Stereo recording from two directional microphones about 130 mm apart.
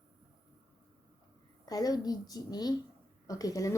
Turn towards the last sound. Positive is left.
turn(degrees=25)  # may be behind; listen again after turning